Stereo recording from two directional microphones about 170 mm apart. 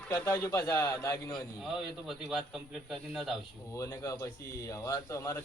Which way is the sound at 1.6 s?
Centre (ahead or behind).